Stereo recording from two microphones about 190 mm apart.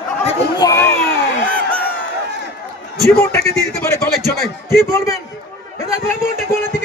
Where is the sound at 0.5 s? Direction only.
15° left (ahead or behind).